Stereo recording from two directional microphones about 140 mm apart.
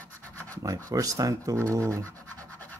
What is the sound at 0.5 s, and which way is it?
Speech, 25° right (ahead or behind).